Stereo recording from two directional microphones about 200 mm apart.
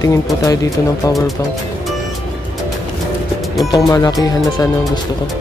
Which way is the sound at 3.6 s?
15° left (ahead or behind).